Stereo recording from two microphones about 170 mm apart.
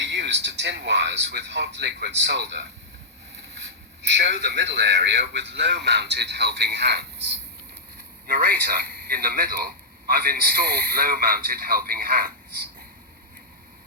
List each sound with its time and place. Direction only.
0.0 s speech: 90° right
4.0 s a man's voice: 90° right
8.3 s a man's voice: 60° right (ahead or behind)